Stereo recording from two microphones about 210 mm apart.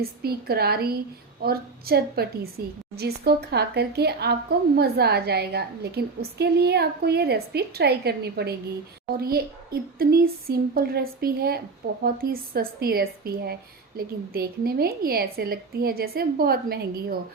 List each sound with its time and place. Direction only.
0.0 s a woman's voice: 45° right (ahead or behind)